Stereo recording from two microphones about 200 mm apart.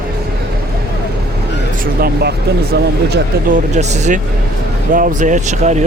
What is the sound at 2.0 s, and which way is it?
Speech, 55° right (ahead or behind).